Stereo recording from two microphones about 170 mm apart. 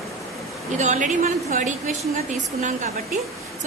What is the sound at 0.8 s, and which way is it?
A woman's voice, 45° right (ahead or behind).